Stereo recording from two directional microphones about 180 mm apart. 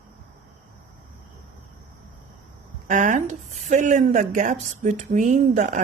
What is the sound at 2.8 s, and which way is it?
Speech, 45° right (ahead or behind).